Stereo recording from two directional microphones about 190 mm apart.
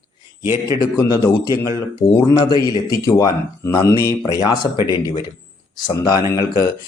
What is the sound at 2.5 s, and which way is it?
Speech, 25° right (ahead or behind).